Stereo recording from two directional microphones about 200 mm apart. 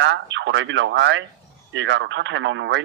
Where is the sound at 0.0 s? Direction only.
65° right (ahead or behind).